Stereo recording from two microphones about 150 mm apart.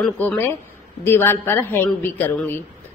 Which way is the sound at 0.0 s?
10° left (ahead or behind).